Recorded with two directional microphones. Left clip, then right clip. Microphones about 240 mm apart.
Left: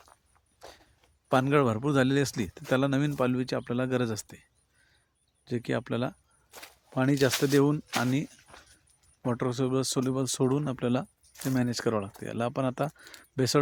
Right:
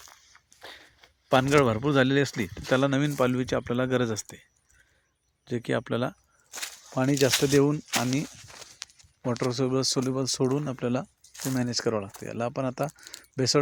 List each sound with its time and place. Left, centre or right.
1.3 s speech: centre
5.5 s speech: centre
6.5 s keys jangling: right
6.9 s speech: centre
11.2 s a sound: right
11.5 s speech: centre
13.1 s keys jangling: centre